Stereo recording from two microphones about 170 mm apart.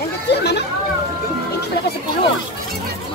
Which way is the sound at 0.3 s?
80° left.